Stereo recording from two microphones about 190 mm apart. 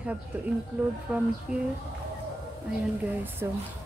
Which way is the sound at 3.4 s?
15° right (ahead or behind).